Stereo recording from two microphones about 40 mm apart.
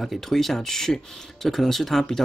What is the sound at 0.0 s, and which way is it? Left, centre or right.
Speech, centre.